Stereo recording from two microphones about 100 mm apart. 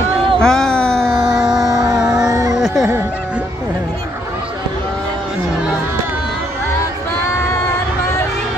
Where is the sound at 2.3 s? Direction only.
35° right (ahead or behind).